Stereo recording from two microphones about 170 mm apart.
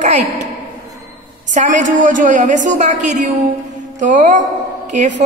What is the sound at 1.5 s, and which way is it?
A woman's voice, 50° right (ahead or behind).